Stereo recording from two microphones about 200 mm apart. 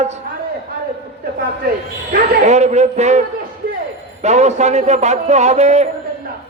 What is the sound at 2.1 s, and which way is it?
A man's voice, 35° right (ahead or behind).